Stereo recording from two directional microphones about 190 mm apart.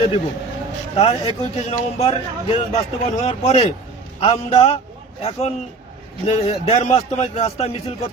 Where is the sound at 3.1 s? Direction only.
35° left (ahead or behind).